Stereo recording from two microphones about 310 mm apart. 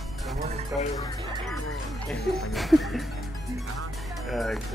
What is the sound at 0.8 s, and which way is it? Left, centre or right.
Speech, centre.